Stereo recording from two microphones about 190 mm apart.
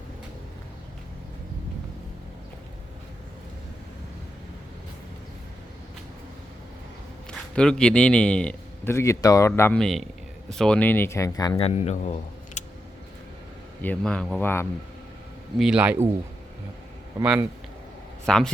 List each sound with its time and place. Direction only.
7.3 s a man's voice: 5° left (ahead or behind); by 12.6 s 35° left (ahead or behind)
13.8 s speech: 5° left (ahead or behind)
15.5 s speech: 5° right (ahead or behind)
18.3 s speech: 5° left (ahead or behind)